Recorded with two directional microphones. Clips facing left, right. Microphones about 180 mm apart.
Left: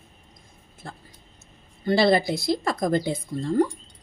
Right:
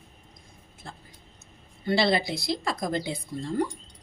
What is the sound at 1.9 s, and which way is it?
Speech, 50° left (ahead or behind).